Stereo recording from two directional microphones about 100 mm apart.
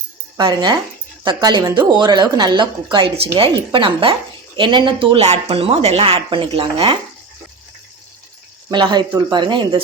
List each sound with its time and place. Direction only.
0.3 s a woman's voice: 45° right (ahead or behind)
3.2 s speech: 60° right (ahead or behind)
8.7 s a woman's voice: 45° right (ahead or behind)